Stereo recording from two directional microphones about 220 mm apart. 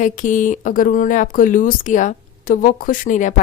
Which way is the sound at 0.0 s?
35° left (ahead or behind).